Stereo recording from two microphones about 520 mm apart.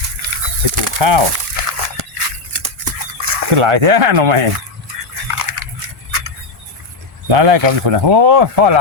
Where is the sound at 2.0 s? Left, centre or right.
Right.